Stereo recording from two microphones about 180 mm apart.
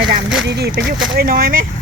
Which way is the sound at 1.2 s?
55° right (ahead or behind).